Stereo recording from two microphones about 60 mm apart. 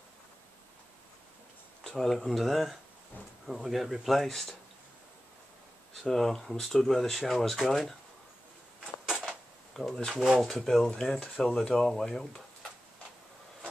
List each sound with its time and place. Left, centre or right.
1.8 s speech: centre
6.0 s speech: centre
9.1 s creak: centre
9.8 s speech: centre
11.4 s speech: centre